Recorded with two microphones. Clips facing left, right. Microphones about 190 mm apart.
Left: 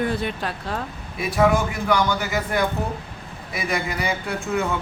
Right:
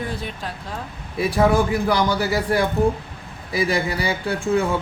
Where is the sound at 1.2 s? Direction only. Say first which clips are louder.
Right 2 dB; 30° right (ahead or behind).